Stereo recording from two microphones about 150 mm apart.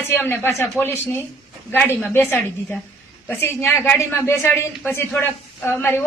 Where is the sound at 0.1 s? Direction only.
15° left (ahead or behind).